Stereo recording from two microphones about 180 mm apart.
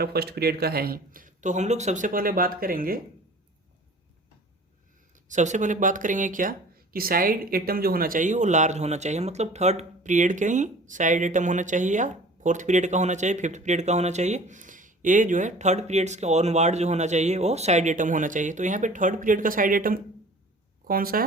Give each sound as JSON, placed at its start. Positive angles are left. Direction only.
{"t": 0.0, "sound": "speech", "side_deg": -60}
{"t": 5.3, "sound": "speech", "side_deg": -40}